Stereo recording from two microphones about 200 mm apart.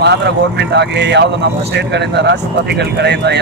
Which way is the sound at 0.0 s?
60° right (ahead or behind).